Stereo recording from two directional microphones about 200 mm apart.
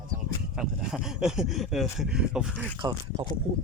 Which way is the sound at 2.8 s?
20° right (ahead or behind).